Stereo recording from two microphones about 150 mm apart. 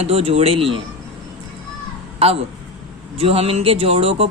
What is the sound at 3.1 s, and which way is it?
A woman's voice, 40° right (ahead or behind).